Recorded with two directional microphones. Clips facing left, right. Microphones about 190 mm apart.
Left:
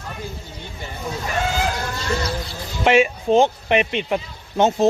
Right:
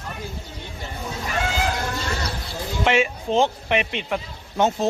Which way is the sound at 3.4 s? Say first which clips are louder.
Left 3 dB; 20° left (ahead or behind).